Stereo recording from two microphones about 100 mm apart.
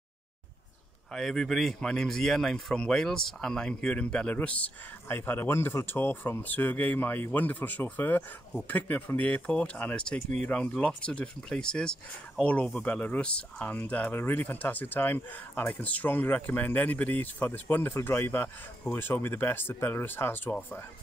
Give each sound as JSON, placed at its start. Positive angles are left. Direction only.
{"t": 1.1, "sound": "speech", "side_deg": 5}